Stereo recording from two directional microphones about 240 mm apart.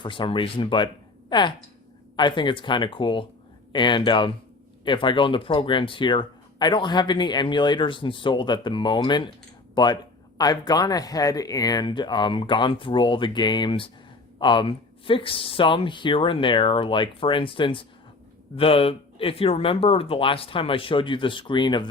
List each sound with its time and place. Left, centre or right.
0.0 s speech: left